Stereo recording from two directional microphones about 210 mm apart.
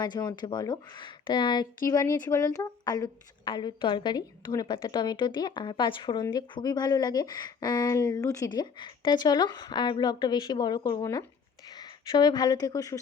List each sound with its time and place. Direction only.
0.0 s a woman's voice: 20° left (ahead or behind)